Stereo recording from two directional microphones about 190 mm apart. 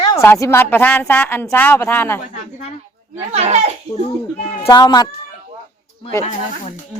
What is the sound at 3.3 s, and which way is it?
Speech, 35° right (ahead or behind).